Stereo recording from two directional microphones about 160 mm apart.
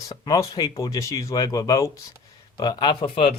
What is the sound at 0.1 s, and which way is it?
Speech, 20° left (ahead or behind).